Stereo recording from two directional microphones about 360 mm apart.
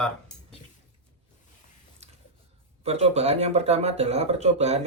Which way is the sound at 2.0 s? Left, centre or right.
Centre.